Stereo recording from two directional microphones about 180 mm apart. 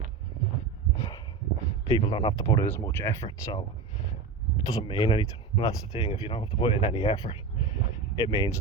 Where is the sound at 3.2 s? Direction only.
25° left (ahead or behind).